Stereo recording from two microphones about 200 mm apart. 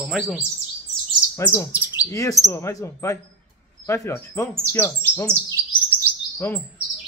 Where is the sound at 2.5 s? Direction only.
15° left (ahead or behind).